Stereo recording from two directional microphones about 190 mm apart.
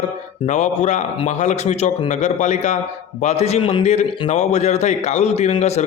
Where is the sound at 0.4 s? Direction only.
40° left (ahead or behind).